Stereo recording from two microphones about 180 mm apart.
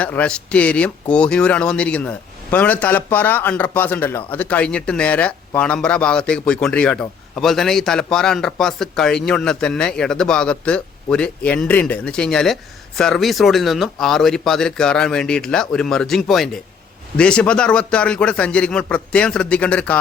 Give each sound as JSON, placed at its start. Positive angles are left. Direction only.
{"t": 0.0, "sound": "a man's voice", "side_deg": 5}